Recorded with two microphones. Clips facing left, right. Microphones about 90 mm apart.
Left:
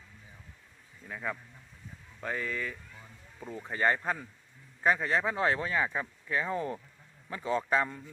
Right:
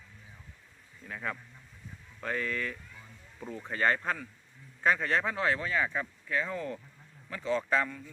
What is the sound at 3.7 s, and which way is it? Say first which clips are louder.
Speech: even; 15° left (ahead or behind).